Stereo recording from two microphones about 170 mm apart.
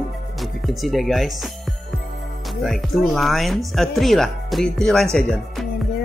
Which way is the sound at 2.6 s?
Centre (ahead or behind).